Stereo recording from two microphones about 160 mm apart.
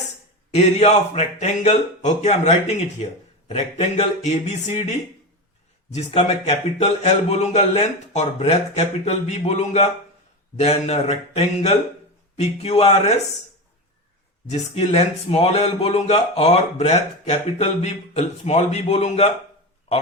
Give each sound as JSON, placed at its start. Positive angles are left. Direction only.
{"t": 0.5, "sound": "speech", "side_deg": 40}
{"t": 6.2, "sound": "speech", "side_deg": 40}
{"t": 12.8, "sound": "speech", "side_deg": 40}
{"t": 14.4, "sound": "speech", "side_deg": 45}